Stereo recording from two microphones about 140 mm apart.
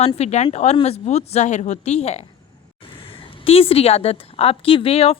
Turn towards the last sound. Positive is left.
turn(degrees=45)  # may be behind; listen again after turning